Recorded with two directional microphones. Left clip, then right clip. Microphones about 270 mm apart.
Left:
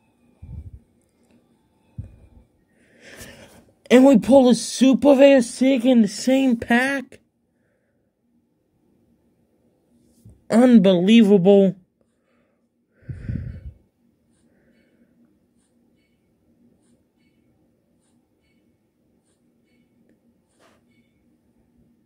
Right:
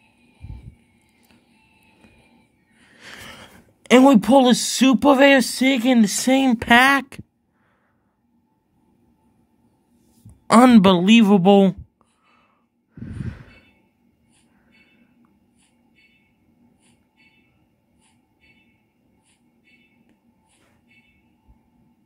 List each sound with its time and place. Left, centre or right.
2.9 s speech: centre
10.4 s speech: centre
13.2 s a sound: centre